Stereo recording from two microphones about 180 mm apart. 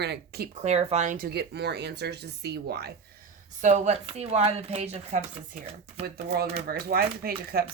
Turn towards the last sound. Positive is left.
turn(degrees=-55)  # may be behind; listen again after turning